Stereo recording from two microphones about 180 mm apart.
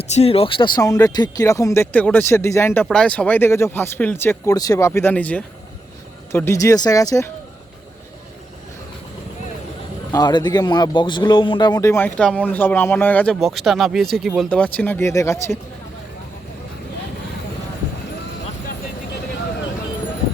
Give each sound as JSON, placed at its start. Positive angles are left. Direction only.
{"t": 0.0, "sound": "speech", "side_deg": 35}
{"t": 0.8, "sound": "speech", "side_deg": 15}
{"t": 10.1, "sound": "speech", "side_deg": 20}